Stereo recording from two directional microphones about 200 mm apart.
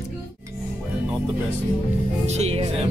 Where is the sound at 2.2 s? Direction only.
35° right (ahead or behind).